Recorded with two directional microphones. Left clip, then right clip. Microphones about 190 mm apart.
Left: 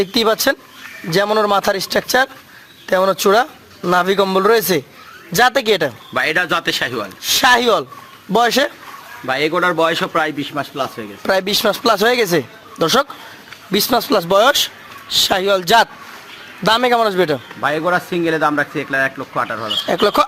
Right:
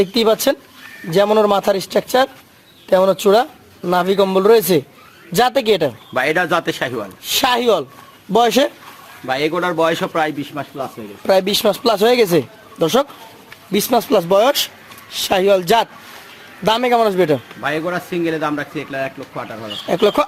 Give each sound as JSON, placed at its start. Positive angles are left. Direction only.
{"t": 0.0, "sound": "speech", "side_deg": 0}
{"t": 6.2, "sound": "speech", "side_deg": -15}
{"t": 10.5, "sound": "speech", "side_deg": 10}
{"t": 11.2, "sound": "speech", "side_deg": -5}
{"t": 17.6, "sound": "speech", "side_deg": 30}
{"t": 19.9, "sound": "speech", "side_deg": 0}